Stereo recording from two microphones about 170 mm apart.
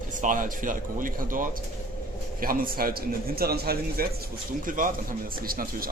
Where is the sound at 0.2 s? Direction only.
50° right (ahead or behind).